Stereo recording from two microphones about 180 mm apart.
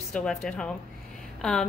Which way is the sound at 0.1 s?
5° left (ahead or behind).